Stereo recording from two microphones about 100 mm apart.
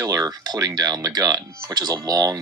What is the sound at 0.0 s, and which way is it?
Speech, 35° right (ahead or behind).